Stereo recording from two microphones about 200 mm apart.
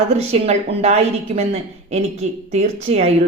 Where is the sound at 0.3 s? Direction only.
30° right (ahead or behind).